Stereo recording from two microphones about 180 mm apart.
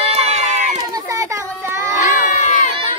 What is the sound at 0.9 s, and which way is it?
Children playing, 20° right (ahead or behind).